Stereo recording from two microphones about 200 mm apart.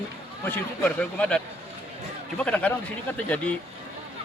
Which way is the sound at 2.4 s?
5° left (ahead or behind).